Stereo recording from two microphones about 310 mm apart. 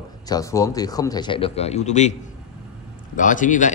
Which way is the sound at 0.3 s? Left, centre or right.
Centre.